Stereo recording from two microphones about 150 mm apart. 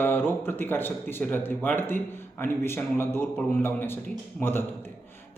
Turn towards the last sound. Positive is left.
turn(degrees=15)  # may be behind; listen again after turning